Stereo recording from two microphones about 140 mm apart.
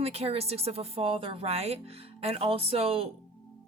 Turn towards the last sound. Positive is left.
turn(degrees=-40)  # may be behind; listen again after turning